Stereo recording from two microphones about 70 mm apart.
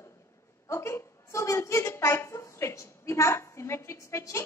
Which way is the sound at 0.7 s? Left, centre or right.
Left.